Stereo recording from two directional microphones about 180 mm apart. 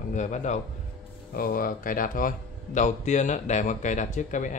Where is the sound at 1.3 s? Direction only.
55° left (ahead or behind).